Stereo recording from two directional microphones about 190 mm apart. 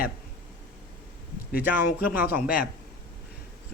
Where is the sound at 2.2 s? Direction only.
10° right (ahead or behind).